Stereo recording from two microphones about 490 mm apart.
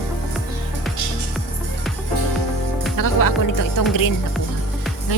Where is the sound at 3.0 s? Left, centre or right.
Left.